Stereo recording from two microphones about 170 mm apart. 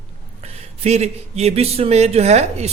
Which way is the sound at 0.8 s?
40° right (ahead or behind).